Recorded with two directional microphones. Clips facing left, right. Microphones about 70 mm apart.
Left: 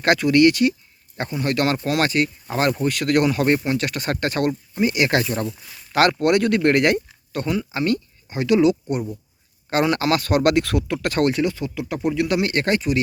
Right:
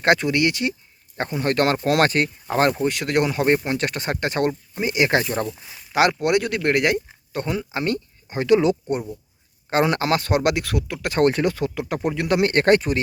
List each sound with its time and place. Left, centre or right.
0.0 s speech: right; by 7.0 s centre
7.3 s speech: right
10.4 s speech: centre
11.2 s speech: right